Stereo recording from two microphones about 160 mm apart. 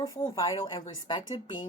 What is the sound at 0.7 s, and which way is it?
Speech, 35° left (ahead or behind).